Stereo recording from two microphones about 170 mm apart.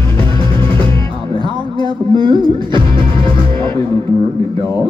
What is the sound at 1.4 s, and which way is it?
Music, 30° right (ahead or behind).